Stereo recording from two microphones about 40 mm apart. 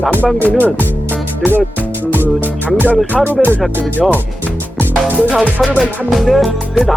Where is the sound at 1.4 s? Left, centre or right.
Right.